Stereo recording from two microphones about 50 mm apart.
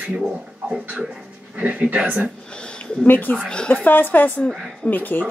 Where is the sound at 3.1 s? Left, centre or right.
Left.